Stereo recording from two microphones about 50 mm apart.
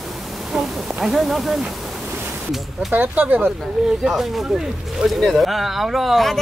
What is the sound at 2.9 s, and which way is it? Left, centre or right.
Speech, right.